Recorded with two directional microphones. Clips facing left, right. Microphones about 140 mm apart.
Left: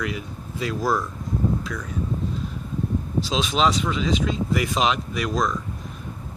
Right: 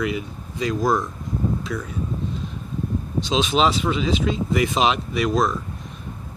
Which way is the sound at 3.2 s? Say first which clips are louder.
Right 3 dB; centre (ahead or behind).